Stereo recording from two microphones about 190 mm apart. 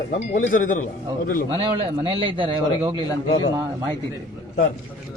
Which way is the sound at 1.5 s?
30° right (ahead or behind).